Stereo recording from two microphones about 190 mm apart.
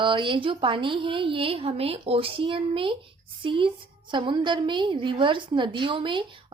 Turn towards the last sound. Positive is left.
turn(degrees=-25)  # may be behind; listen again after turning